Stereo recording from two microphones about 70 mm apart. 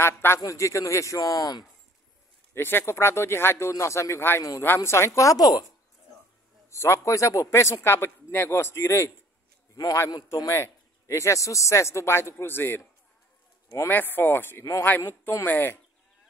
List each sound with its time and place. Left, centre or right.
0.0 s a man's voice: left
0.5 s speech: left
1.2 s speech: left
2.5 s a man's voice: left
6.7 s a man's voice: left
10.5 s speech: left
13.8 s speech: left
14.6 s a man's voice: left